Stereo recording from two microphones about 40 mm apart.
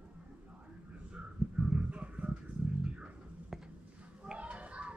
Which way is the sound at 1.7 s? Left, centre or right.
Right.